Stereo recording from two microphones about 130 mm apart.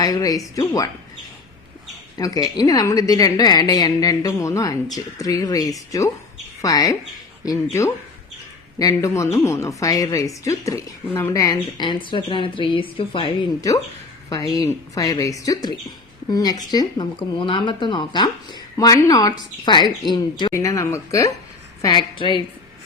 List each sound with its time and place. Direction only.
0.0 s a woman's voice: 30° left (ahead or behind)
2.1 s a woman's voice: 30° left (ahead or behind)
11.5 s speech: 35° left (ahead or behind)
14.5 s a woman's voice: 25° left (ahead or behind)
20.5 s a woman's voice: 25° left (ahead or behind)